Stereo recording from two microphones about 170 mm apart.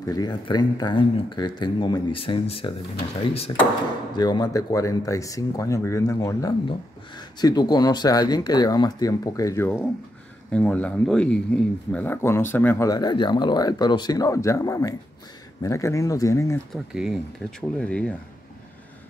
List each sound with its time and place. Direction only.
0.0 s speech: 20° left (ahead or behind)
4.1 s speech: 25° left (ahead or behind)
16.7 s speech: 5° right (ahead or behind)